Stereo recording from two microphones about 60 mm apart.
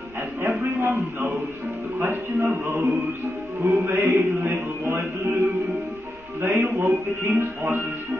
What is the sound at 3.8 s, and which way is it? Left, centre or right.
Music, right.